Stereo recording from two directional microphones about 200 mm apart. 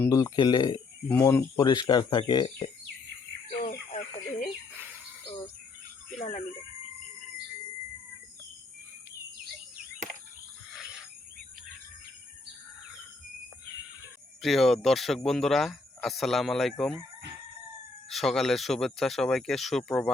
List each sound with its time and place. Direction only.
0.0 s speech: 15° left (ahead or behind)
3.7 s chicken: 40° left (ahead or behind)
6.1 s a sound: 35° left (ahead or behind)
14.4 s speech: centre (ahead or behind)
18.1 s speech: centre (ahead or behind)